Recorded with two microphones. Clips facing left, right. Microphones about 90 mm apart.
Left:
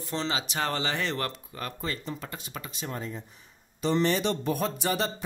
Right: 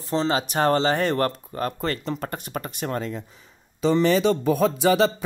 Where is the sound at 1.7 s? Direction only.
70° right (ahead or behind).